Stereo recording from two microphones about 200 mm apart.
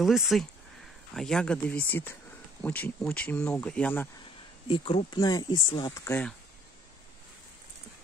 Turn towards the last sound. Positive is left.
turn(degrees=10)  # may be behind; listen again after turning